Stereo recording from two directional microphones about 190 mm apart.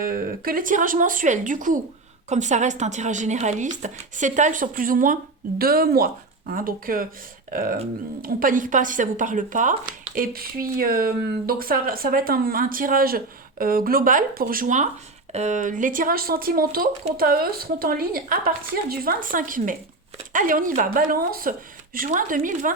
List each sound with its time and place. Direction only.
0.0 s speech: 50° right (ahead or behind)